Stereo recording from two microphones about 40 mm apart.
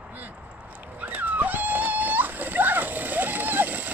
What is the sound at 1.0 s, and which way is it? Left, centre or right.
Splash, right.